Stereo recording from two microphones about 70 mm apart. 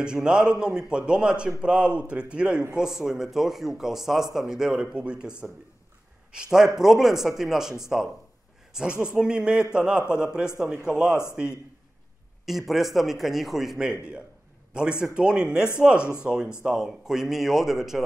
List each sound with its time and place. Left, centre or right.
0.0 s a man's voice: centre
9.0 s speech: centre
12.4 s a man's voice: centre
16.0 s speech: left
16.6 s a man's voice: centre